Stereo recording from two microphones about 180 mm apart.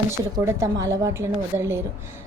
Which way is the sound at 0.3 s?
20° right (ahead or behind).